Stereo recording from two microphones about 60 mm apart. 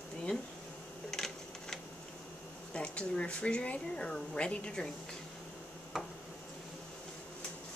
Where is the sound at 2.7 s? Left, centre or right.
Centre.